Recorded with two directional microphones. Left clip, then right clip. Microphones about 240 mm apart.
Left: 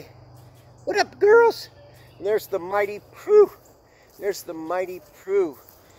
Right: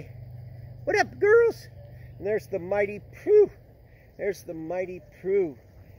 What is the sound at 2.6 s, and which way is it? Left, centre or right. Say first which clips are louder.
Speech: left 3 dB; left.